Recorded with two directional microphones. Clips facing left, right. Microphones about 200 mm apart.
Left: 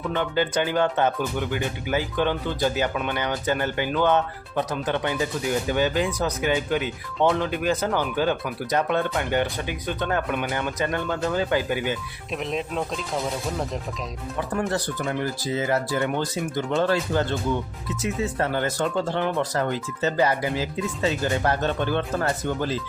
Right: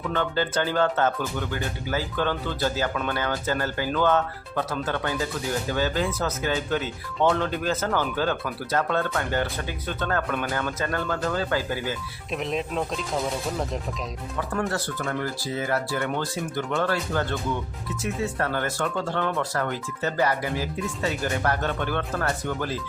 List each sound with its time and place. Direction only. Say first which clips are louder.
0.1 s speech: left 2 dB; 15° left (ahead or behind)
12.3 s speech: even; centre (ahead or behind)
14.7 s speech: left 2 dB; 15° left (ahead or behind)